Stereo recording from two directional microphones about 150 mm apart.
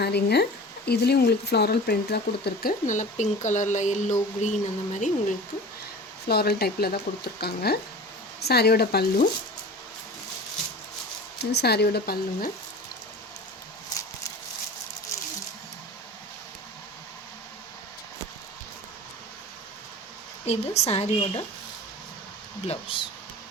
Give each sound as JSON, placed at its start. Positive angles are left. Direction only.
{"t": 0.0, "sound": "a woman's voice", "side_deg": 90}
{"t": 6.2, "sound": "speech", "side_deg": 90}
{"t": 11.3, "sound": "speech", "side_deg": 90}
{"t": 20.5, "sound": "a woman's voice", "side_deg": 45}
{"t": 22.6, "sound": "speech", "side_deg": 40}